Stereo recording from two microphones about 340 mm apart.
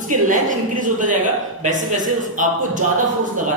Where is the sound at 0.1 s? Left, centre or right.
Right.